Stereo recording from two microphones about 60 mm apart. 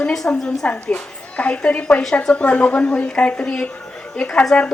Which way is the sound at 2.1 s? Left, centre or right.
Centre.